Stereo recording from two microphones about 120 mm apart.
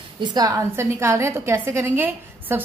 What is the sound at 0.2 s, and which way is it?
A woman's voice, 35° right (ahead or behind).